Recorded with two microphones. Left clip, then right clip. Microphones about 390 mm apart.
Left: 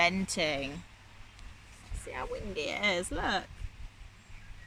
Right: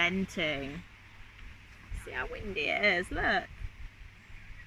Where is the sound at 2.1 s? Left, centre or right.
Centre.